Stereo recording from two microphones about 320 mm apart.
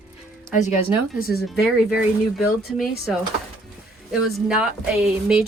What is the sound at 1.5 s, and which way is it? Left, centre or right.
A woman's voice, centre.